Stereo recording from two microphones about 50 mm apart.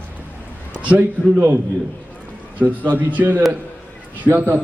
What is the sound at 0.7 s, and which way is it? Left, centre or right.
Speech, right.